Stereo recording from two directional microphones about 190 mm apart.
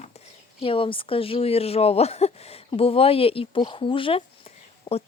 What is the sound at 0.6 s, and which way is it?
Speech, 30° left (ahead or behind).